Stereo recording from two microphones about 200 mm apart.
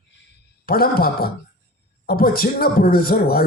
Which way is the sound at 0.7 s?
50° left (ahead or behind).